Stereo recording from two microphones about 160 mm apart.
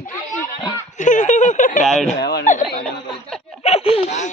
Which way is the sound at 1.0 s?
50° left (ahead or behind).